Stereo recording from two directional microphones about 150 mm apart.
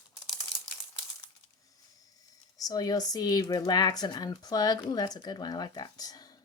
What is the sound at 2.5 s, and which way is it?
Speech, 25° left (ahead or behind).